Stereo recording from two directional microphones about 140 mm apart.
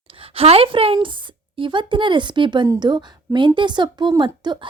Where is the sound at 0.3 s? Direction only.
45° right (ahead or behind).